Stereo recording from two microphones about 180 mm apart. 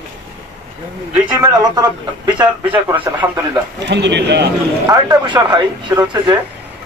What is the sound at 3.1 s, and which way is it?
Speech, 20° right (ahead or behind).